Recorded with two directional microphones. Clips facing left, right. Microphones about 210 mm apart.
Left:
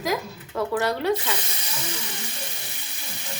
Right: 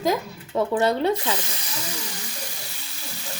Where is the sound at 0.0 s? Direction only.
25° right (ahead or behind).